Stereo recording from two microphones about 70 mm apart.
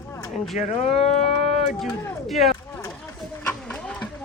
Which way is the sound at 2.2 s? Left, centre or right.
Centre.